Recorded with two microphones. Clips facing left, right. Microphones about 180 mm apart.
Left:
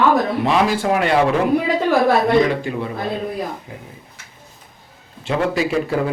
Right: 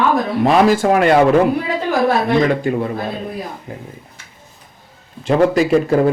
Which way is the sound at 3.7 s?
45° right (ahead or behind).